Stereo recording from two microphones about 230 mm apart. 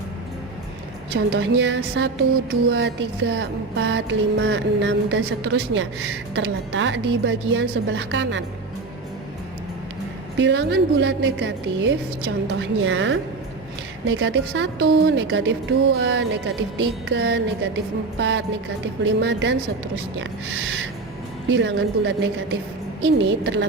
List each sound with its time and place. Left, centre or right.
1.1 s music: right
10.3 s music: right
21.5 s music: right